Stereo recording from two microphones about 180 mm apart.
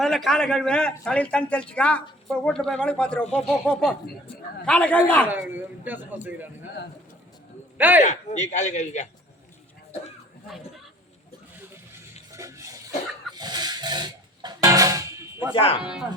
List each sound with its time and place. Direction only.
0.0 s a man's voice: centre (ahead or behind)
5.3 s speech: 10° right (ahead or behind)
7.8 s speech: 10° right (ahead or behind)
8.0 s a man's voice: 40° left (ahead or behind)
12.3 s a sound: 15° right (ahead or behind)
13.3 s music: 20° right (ahead or behind)
15.5 s a man's voice: 30° left (ahead or behind)
15.8 s a man's voice: 5° right (ahead or behind)